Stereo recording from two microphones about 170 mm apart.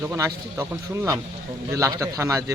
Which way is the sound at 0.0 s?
15° right (ahead or behind).